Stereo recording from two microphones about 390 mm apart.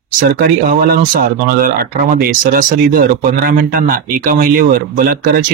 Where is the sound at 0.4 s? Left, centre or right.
Right.